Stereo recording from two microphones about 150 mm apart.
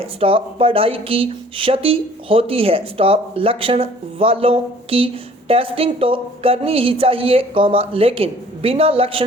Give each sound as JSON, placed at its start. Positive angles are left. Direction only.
{"t": 0.0, "sound": "speech", "side_deg": -40}